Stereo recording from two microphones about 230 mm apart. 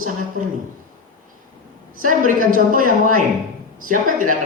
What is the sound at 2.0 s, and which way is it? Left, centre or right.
Speech, right.